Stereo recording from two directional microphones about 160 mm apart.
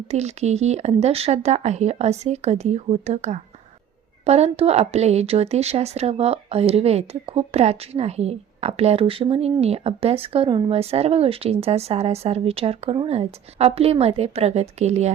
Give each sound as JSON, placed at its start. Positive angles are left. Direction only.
{"t": 0.1, "sound": "a woman's voice", "side_deg": -45}